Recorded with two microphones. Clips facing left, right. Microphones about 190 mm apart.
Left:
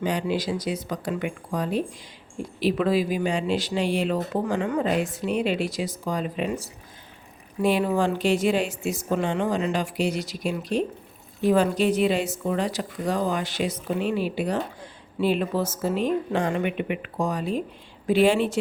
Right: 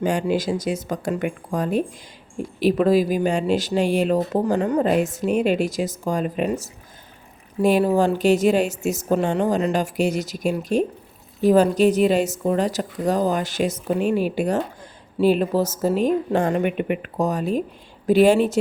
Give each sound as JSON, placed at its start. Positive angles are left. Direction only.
{"t": 0.0, "sound": "speech", "side_deg": -45}